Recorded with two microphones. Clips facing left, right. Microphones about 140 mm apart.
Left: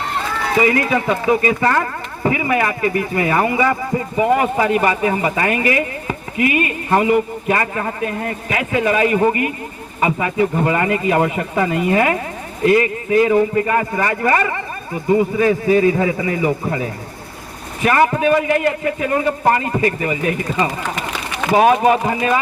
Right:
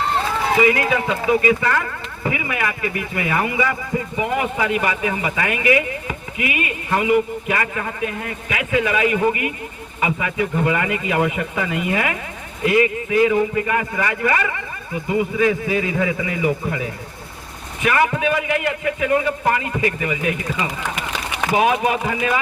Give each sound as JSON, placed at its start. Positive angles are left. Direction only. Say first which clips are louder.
{"t": 1.1, "sound": "speech", "louder": "even", "side_deg": 35}